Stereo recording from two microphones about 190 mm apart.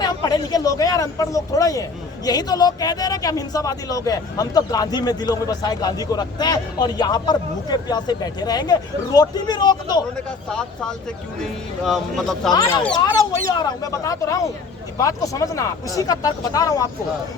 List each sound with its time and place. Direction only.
0.0 s a sound: 20° left (ahead or behind)
2.2 s speech: 20° left (ahead or behind)
11.9 s speech: centre (ahead or behind)
12.5 s speech: 15° left (ahead or behind)